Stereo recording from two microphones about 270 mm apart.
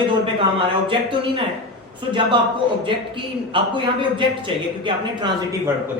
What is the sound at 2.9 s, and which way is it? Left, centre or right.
A man's voice, centre.